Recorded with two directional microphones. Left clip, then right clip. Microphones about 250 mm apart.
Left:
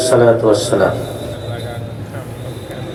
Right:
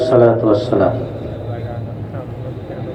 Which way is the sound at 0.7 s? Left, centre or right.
Left.